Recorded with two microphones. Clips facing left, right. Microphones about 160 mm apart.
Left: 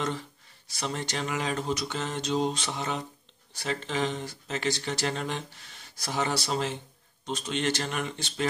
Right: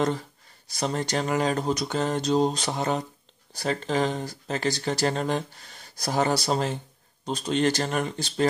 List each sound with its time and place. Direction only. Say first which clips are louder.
0.7 s speech: right 6 dB; 40° right (ahead or behind)